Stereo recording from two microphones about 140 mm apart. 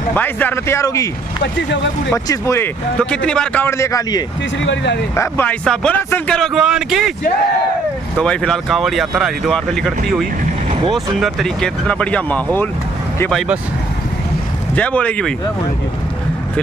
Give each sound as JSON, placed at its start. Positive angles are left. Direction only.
{"t": 0.1, "sound": "speech", "side_deg": 15}
{"t": 2.2, "sound": "speech", "side_deg": 20}
{"t": 3.0, "sound": "speech", "side_deg": 5}
{"t": 8.2, "sound": "speech", "side_deg": 5}
{"t": 14.8, "sound": "speech", "side_deg": 10}